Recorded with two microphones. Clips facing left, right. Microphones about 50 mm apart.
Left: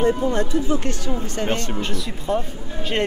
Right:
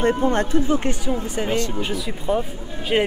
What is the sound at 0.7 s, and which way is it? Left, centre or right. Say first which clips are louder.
Speech: right 2 dB; centre.